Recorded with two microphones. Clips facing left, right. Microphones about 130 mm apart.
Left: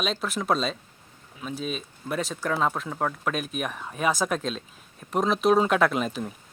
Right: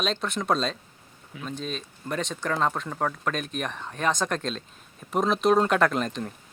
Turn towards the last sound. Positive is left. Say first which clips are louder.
# even
turn(degrees=5)  # may be behind; listen again after turning